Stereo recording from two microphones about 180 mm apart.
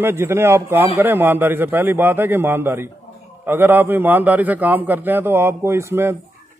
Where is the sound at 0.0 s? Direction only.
15° right (ahead or behind).